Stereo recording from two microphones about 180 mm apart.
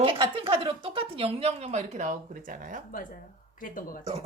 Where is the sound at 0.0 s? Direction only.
30° right (ahead or behind); by 2.8 s 50° right (ahead or behind).